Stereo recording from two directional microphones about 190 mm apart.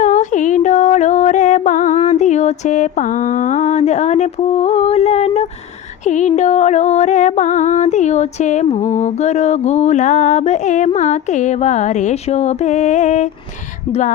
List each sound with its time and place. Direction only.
0.0 s music: 40° left (ahead or behind)
2.0 s mantra: 40° left (ahead or behind)
6.1 s music: 40° left (ahead or behind)